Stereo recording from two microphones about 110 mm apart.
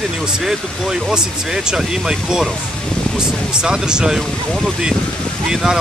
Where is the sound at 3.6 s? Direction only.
5° right (ahead or behind).